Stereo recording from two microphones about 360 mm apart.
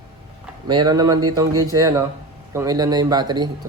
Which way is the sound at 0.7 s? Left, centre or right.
Centre.